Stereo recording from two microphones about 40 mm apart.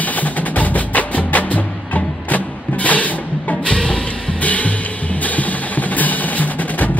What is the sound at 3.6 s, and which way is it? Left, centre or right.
Music, left.